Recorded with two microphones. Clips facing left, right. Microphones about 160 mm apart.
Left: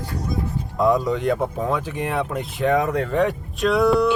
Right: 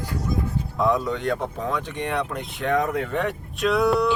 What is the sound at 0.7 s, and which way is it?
Speech, centre (ahead or behind).